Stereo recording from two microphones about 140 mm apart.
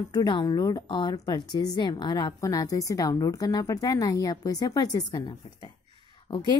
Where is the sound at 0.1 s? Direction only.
30° left (ahead or behind).